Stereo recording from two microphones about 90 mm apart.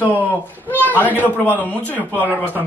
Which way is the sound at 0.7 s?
20° left (ahead or behind).